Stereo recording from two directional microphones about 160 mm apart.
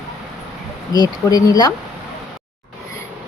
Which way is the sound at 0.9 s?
25° left (ahead or behind).